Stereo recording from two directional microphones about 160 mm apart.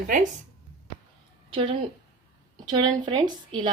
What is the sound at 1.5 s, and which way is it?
A woman's voice, 35° right (ahead or behind).